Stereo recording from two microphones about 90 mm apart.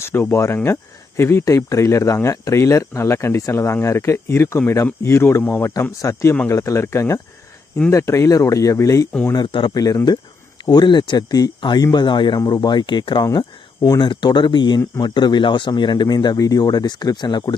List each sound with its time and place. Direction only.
0.0 s speech: 25° left (ahead or behind)
6.0 s speech: 35° left (ahead or behind)
9.3 s speech: 60° left (ahead or behind)
9.7 s speech: 45° left (ahead or behind)